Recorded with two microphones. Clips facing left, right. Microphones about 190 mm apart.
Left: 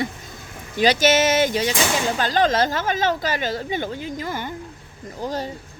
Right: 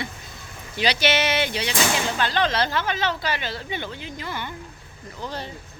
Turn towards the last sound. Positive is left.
turn(degrees=40)  # may be behind; listen again after turning